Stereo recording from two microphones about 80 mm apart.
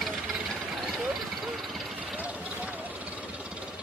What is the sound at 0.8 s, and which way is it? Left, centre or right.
Vehicle, centre.